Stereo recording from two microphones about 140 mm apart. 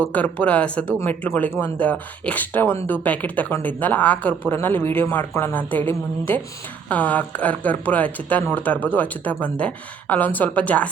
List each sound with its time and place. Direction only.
0.1 s speech: 10° left (ahead or behind)